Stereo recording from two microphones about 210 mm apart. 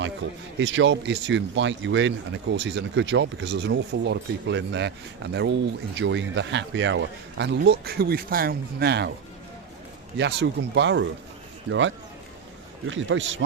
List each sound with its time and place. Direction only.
0.2 s speech: 65° right (ahead or behind)
10.2 s speech: 55° right (ahead or behind)